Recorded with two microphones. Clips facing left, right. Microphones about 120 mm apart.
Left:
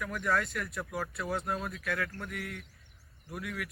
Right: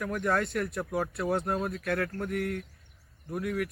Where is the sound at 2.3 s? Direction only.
50° right (ahead or behind).